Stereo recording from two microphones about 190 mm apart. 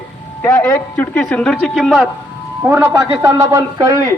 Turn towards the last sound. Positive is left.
turn(degrees=-15)  # may be behind; listen again after turning